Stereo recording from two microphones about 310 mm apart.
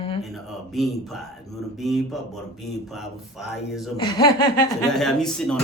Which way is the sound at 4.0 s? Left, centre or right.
Centre.